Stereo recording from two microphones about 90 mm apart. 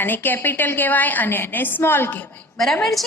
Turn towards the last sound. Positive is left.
turn(degrees=0)  # may be behind; listen again after turning